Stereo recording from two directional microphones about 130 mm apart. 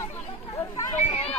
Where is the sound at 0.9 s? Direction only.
60° left (ahead or behind).